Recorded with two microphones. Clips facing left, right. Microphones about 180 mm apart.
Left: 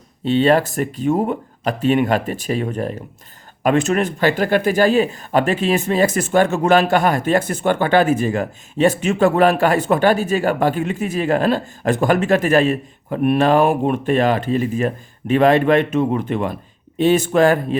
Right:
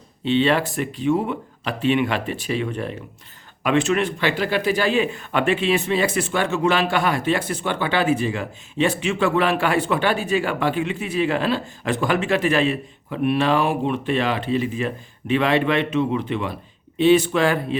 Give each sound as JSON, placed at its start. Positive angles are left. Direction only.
{"t": 0.3, "sound": "speech", "side_deg": 40}